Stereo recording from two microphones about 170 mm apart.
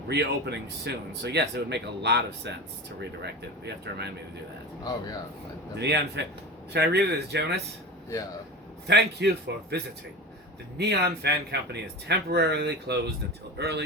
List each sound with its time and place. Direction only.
0.1 s speech: 75° right (ahead or behind)
5.7 s speech: 75° right (ahead or behind)
8.9 s speech: 80° right